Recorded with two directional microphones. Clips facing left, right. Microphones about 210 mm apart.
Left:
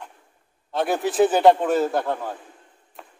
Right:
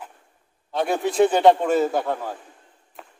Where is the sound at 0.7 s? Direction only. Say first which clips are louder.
Even; centre (ahead or behind).